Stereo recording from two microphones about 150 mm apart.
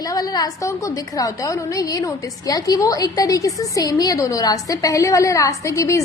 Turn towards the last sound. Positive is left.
turn(degrees=20)  # may be behind; listen again after turning